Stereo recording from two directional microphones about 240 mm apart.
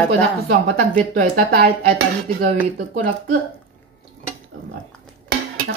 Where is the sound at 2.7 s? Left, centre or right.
Right.